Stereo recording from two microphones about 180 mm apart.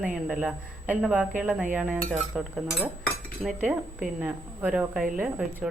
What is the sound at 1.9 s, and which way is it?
Cutlery, 45° right (ahead or behind).